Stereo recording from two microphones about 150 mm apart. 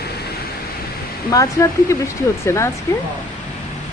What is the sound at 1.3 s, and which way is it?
Speech, 25° left (ahead or behind).